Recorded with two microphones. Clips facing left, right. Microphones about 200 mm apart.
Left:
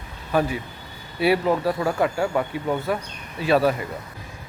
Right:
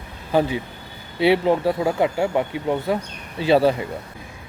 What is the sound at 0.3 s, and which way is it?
Speech, 25° right (ahead or behind).